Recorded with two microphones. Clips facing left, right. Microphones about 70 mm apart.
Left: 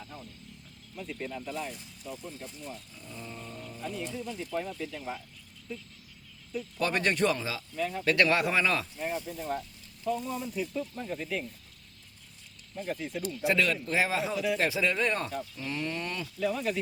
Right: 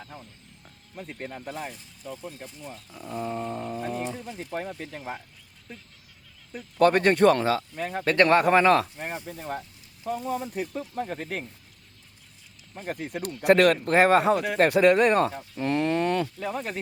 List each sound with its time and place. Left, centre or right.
0.9 s speech: right
6.5 s speech: right
12.7 s speech: right
16.2 s speech: right